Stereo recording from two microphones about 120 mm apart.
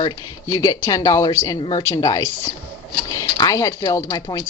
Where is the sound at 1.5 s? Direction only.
40° left (ahead or behind).